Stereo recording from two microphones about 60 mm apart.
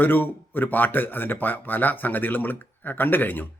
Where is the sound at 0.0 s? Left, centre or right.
Left.